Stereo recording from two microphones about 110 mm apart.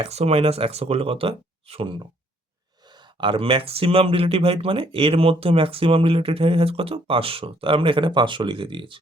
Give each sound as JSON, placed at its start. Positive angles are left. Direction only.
{"t": 0.0, "sound": "speech", "side_deg": -70}
{"t": 3.2, "sound": "speech", "side_deg": -50}